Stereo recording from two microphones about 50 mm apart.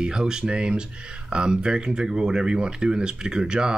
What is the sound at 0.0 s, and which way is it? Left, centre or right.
Speech, centre.